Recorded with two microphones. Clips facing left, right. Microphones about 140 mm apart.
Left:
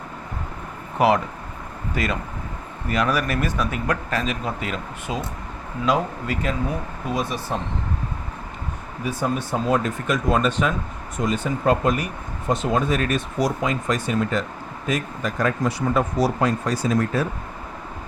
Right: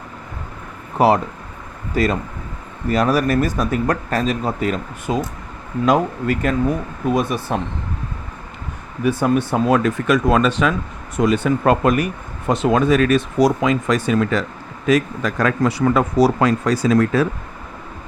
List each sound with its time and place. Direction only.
0.9 s speech: 35° right (ahead or behind); by 7.6 s 55° right (ahead or behind)
9.0 s speech: 60° right (ahead or behind); by 10.8 s 90° right
11.2 s speech: 70° right (ahead or behind); by 17.2 s 90° right